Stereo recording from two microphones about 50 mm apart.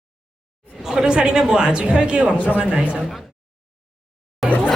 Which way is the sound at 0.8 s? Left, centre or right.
Centre.